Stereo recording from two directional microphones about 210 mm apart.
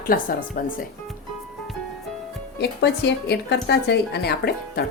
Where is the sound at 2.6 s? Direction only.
55° left (ahead or behind).